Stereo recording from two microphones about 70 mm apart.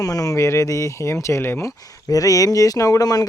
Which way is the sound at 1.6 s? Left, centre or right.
Left.